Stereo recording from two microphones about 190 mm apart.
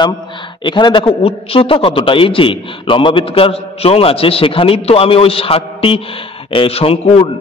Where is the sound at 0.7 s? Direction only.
25° left (ahead or behind).